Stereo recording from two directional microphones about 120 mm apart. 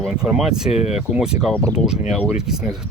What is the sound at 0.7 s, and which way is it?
Speech, 65° left (ahead or behind).